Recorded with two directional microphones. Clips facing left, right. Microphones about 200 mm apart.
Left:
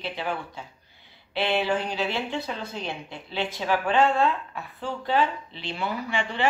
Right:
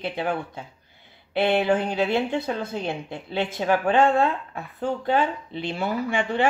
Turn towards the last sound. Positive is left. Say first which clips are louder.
# right 4 dB
turn(degrees=-50)  # may be behind; listen again after turning